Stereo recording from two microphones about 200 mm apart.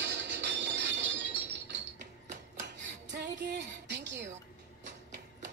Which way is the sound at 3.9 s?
60° right (ahead or behind).